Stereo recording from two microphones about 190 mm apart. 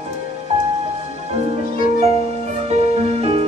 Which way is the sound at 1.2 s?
35° right (ahead or behind).